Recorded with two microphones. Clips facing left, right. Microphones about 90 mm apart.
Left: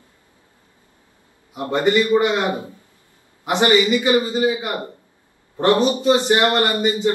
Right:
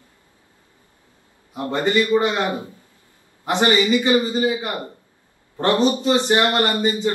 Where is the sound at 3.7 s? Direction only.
20° left (ahead or behind).